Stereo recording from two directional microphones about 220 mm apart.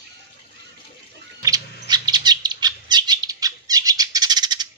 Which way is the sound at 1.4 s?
15° right (ahead or behind).